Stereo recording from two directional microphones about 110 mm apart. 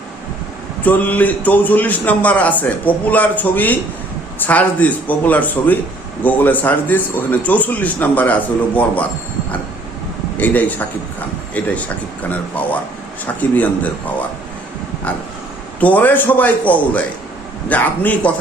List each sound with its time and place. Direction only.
0.8 s a man's voice: 15° left (ahead or behind)
10.3 s a man's voice: 15° left (ahead or behind)
13.4 s a man's voice: 15° left (ahead or behind)
15.8 s a man's voice: 15° left (ahead or behind)